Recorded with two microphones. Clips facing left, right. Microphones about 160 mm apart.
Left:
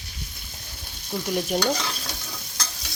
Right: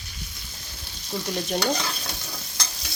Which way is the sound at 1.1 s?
10° left (ahead or behind).